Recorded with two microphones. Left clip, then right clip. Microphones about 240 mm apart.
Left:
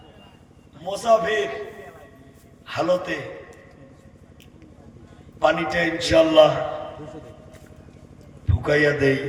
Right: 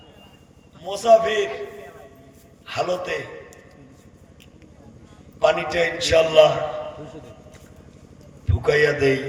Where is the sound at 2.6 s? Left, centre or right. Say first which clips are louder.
Left 2 dB; right.